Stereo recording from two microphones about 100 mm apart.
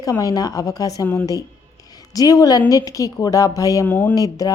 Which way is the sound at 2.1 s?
40° left (ahead or behind).